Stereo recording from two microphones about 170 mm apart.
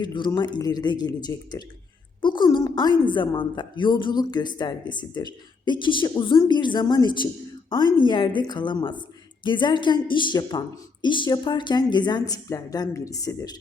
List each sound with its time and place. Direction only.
0.0 s speech: 25° left (ahead or behind)